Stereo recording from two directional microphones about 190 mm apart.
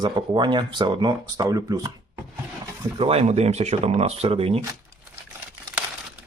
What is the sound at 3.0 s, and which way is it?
Speech, 30° right (ahead or behind).